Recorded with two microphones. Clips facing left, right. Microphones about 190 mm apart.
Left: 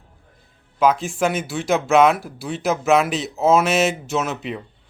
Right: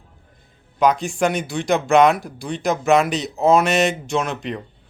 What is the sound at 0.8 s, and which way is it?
Speech, centre (ahead or behind).